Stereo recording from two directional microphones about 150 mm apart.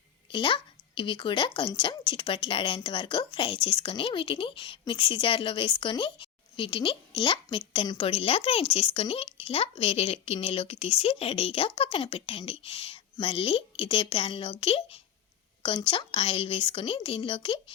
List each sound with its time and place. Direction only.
0.3 s speech: 35° left (ahead or behind)